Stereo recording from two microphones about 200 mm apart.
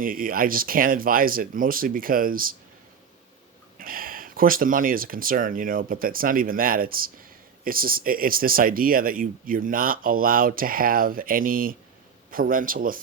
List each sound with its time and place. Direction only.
0.0 s speech: 45° right (ahead or behind)
3.8 s speech: 45° right (ahead or behind)